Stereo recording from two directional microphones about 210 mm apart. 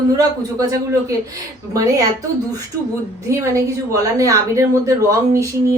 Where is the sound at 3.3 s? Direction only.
15° right (ahead or behind).